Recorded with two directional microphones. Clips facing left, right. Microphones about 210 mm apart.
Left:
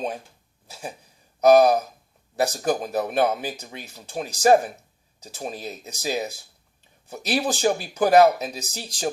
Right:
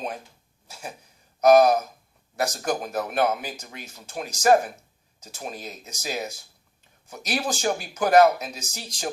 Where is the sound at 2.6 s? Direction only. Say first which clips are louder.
Left 3 dB; 35° left (ahead or behind).